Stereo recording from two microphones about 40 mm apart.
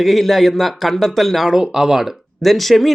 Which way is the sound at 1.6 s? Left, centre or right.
Centre.